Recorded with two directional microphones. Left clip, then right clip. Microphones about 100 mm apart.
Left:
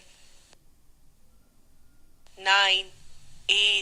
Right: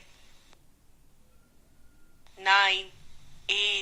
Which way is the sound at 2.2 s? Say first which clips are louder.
Left 1 dB; 25° left (ahead or behind).